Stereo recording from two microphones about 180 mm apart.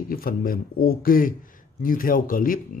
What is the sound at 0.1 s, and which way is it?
Speech, 55° left (ahead or behind).